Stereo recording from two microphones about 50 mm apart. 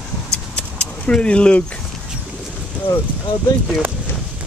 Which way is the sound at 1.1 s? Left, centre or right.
Left.